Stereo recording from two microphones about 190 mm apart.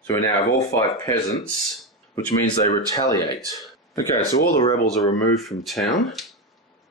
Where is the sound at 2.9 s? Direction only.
20° left (ahead or behind).